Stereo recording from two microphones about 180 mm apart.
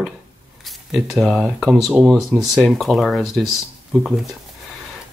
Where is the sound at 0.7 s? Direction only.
Centre (ahead or behind).